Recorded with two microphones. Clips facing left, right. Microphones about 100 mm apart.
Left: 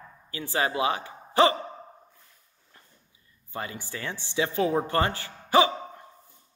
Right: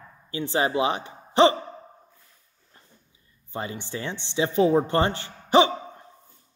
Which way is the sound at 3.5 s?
25° right (ahead or behind).